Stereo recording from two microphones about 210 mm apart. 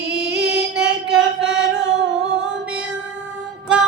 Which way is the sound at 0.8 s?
50° right (ahead or behind).